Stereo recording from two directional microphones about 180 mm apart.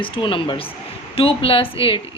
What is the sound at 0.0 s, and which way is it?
A woman's voice, 30° left (ahead or behind).